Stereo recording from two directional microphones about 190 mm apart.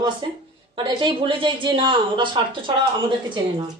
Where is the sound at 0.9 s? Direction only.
25° right (ahead or behind).